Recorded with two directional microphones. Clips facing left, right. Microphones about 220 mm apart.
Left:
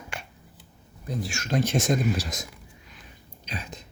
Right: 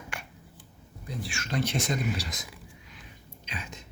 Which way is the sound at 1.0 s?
45° left (ahead or behind).